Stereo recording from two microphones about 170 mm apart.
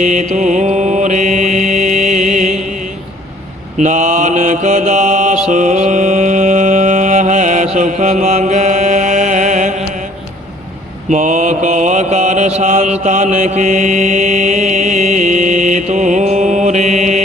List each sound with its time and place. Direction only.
0.0 s mantra: 45° right (ahead or behind)
3.8 s mantra: 45° right (ahead or behind)
11.1 s mantra: 45° right (ahead or behind)